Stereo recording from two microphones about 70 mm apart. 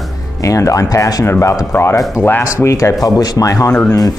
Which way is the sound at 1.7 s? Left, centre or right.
Left.